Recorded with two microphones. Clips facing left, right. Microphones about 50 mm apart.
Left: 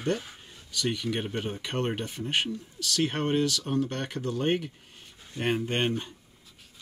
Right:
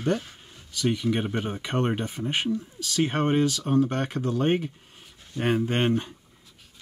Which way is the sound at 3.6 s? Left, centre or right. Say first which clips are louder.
Right 6 dB; right.